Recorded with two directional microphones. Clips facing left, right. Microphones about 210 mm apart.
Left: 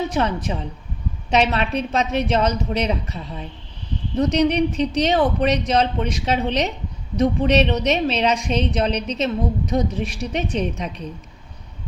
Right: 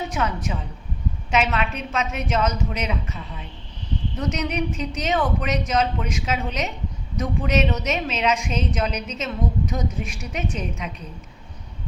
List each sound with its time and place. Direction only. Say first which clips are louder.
0.1 s speech: left 4 dB; 30° left (ahead or behind)